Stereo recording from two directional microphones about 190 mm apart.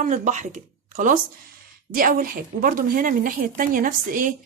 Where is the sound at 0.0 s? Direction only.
40° right (ahead or behind).